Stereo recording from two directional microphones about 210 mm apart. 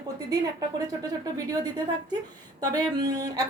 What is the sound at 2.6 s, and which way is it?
Speech, 20° right (ahead or behind).